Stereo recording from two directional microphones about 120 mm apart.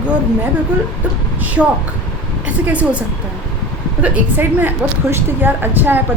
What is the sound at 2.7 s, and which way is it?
Speech, 10° right (ahead or behind).